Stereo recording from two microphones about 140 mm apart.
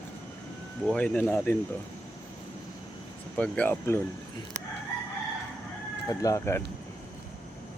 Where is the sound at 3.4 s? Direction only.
10° left (ahead or behind).